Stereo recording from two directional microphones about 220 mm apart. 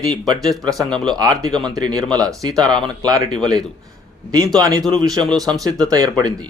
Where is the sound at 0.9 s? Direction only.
5° left (ahead or behind).